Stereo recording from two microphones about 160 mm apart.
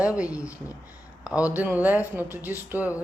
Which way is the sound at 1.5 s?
10° right (ahead or behind).